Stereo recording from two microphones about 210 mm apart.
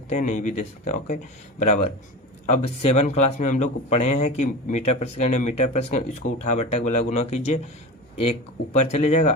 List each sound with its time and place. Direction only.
0.1 s speech: 35° left (ahead or behind)
8.7 s speech: 35° left (ahead or behind)